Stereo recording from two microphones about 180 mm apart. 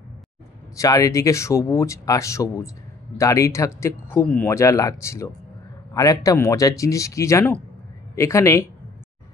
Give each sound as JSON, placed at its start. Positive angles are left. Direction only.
{"t": 0.7, "sound": "speech", "side_deg": 20}